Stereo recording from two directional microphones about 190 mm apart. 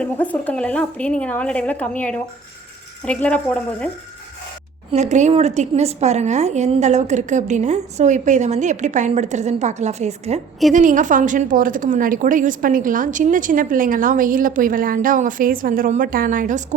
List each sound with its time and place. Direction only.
0.0 s a woman's voice: 5° left (ahead or behind)
4.9 s a woman's voice: 35° right (ahead or behind)